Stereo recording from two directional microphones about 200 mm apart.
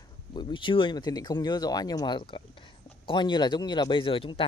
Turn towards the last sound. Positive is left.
turn(degrees=25)  # may be behind; listen again after turning